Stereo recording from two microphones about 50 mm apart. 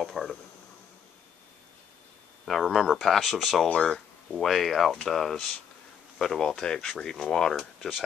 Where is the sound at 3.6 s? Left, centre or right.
Centre.